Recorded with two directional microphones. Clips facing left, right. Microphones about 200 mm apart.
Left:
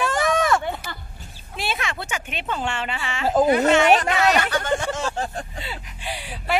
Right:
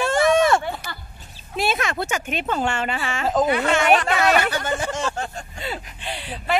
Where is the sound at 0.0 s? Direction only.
25° right (ahead or behind).